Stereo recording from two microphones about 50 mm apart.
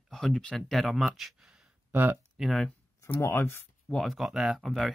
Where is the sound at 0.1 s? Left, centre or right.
Centre.